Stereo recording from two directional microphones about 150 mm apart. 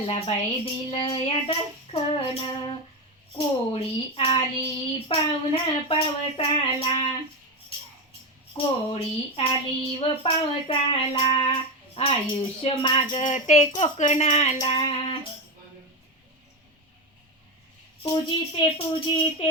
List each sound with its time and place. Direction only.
0.0 s child singing: 40° left (ahead or behind)
3.3 s child singing: 40° left (ahead or behind)
8.5 s child singing: 40° left (ahead or behind)
13.2 s speech: 50° left (ahead or behind)
14.7 s child singing: 35° left (ahead or behind)
18.0 s child singing: 30° left (ahead or behind)